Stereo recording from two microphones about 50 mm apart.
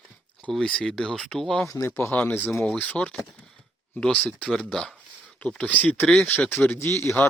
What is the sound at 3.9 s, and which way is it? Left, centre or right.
Speech, left.